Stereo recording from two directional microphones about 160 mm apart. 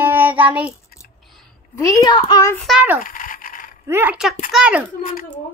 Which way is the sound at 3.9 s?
10° right (ahead or behind).